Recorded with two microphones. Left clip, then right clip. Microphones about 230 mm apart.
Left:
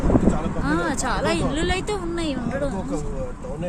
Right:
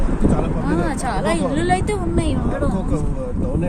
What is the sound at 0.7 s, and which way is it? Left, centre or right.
Speech, centre.